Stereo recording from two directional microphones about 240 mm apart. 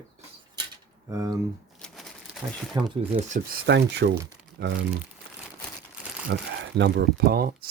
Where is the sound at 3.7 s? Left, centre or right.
Right.